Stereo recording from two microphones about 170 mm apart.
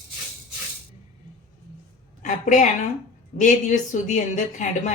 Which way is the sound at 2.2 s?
45° left (ahead or behind).